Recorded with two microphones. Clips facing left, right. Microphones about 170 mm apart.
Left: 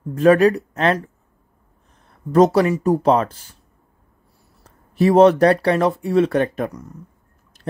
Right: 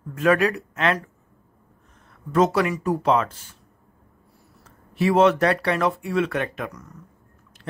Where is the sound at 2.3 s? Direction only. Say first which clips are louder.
Left 6 dB; 35° left (ahead or behind).